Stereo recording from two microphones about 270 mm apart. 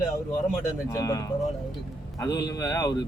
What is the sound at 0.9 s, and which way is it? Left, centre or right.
Speech, centre.